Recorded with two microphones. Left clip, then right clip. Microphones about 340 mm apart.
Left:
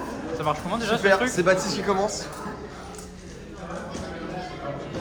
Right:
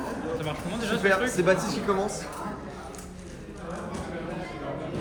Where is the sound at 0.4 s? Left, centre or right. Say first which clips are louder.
Left 6 dB; centre.